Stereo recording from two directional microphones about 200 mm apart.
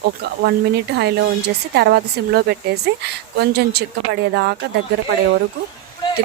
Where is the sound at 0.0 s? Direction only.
55° right (ahead or behind).